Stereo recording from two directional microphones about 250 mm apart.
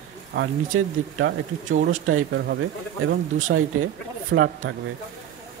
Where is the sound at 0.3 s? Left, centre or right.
Right.